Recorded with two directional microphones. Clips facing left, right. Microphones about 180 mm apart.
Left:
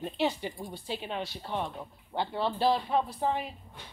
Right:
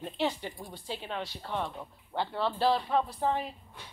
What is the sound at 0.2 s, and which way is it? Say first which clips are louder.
Speech: left 1 dB; 15° left (ahead or behind).